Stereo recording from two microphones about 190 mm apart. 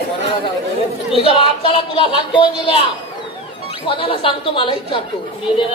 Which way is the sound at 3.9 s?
25° left (ahead or behind).